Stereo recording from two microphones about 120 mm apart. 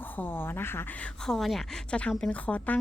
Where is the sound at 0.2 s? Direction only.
15° left (ahead or behind).